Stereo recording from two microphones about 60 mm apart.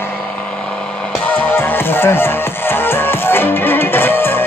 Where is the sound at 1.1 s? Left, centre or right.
Left.